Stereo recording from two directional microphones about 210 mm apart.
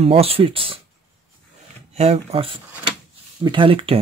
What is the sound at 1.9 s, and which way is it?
Speech, 30° right (ahead or behind).